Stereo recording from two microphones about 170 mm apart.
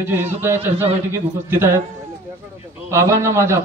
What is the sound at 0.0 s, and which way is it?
A man's voice, 15° right (ahead or behind).